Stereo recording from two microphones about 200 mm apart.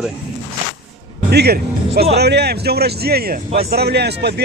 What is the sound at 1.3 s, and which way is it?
Speech, 55° right (ahead or behind).